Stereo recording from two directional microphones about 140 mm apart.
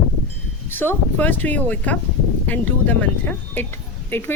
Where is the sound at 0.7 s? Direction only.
15° left (ahead or behind).